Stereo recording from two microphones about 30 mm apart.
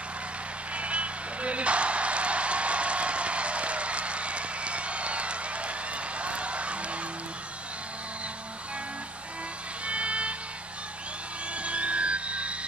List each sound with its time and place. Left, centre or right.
0.7 s music: right
9.8 s vehicle: right
11.5 s a sound: right